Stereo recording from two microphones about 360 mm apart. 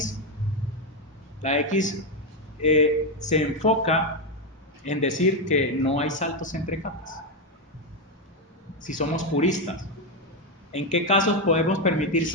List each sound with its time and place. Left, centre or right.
1.4 s a man's voice: centre
8.8 s a man's voice: left